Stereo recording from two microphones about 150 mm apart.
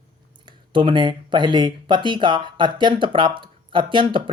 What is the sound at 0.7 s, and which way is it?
Speech, 35° right (ahead or behind).